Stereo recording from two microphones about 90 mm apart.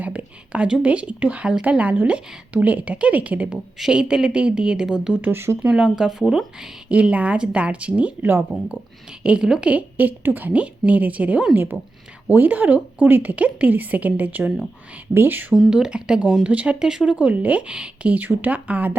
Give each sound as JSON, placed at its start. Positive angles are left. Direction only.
{"t": 0.0, "sound": "speech", "side_deg": -15}
{"t": 5.2, "sound": "speech", "side_deg": -25}
{"t": 5.6, "sound": "speech", "side_deg": -10}
{"t": 9.2, "sound": "speech", "side_deg": -10}
{"t": 15.7, "sound": "speech", "side_deg": -10}